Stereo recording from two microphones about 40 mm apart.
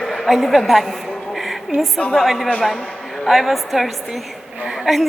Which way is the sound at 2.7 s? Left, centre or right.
Centre.